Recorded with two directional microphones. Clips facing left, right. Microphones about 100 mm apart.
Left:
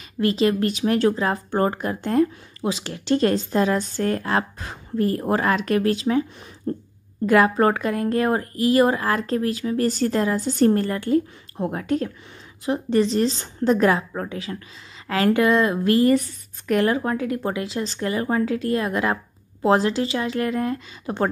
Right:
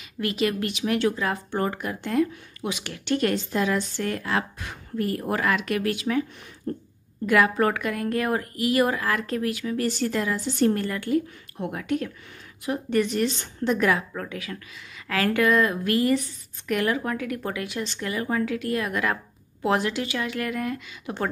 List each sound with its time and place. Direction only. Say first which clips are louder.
0.2 s a woman's voice: left 6 dB; 30° left (ahead or behind)
16.2 s a woman's voice: left 6 dB; 50° left (ahead or behind)
16.7 s speech: left 5 dB; 35° left (ahead or behind)